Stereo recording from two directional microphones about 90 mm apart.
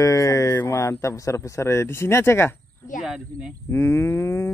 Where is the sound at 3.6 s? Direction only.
25° left (ahead or behind).